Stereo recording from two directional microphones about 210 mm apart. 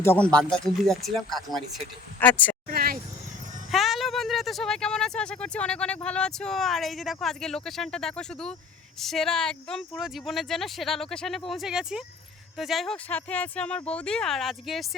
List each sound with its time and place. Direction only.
0.0 s speech: 10° left (ahead or behind)
2.6 s vehicle: 45° right (ahead or behind)
3.7 s speech: centre (ahead or behind)